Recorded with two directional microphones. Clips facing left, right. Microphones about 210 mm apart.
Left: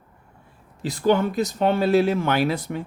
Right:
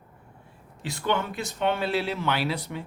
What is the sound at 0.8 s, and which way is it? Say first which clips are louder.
Speech: left 8 dB; 40° left (ahead or behind).